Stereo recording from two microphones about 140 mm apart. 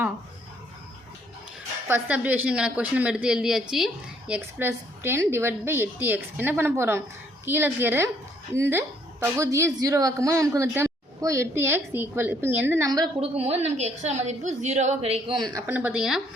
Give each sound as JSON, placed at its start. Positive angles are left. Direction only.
{"t": 1.9, "sound": "a woman's voice", "side_deg": -10}
{"t": 4.4, "sound": "a woman's voice", "side_deg": -15}
{"t": 13.1, "sound": "a woman's voice", "side_deg": -45}
{"t": 15.4, "sound": "speech", "side_deg": -30}
{"t": 15.6, "sound": "a woman's voice", "side_deg": -10}